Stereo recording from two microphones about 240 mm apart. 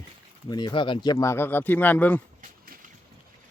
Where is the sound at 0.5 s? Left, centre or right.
Centre.